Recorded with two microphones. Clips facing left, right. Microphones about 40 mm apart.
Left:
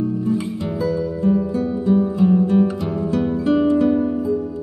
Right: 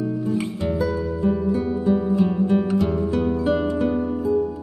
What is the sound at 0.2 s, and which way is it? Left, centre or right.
Music, centre.